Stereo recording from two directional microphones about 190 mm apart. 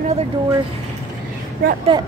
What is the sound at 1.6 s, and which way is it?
Speech, 50° right (ahead or behind).